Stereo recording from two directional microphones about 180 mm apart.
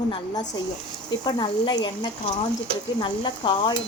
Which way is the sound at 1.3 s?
25° left (ahead or behind).